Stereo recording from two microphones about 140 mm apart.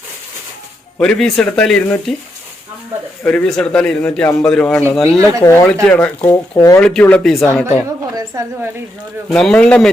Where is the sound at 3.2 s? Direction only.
5° left (ahead or behind).